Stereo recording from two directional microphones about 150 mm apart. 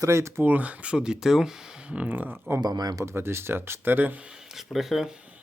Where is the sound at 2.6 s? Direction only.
25° right (ahead or behind).